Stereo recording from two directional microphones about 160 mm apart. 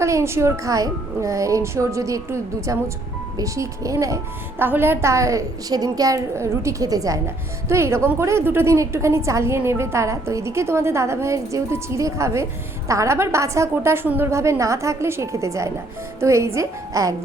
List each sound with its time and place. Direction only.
0.0 s a woman's voice: 20° right (ahead or behind)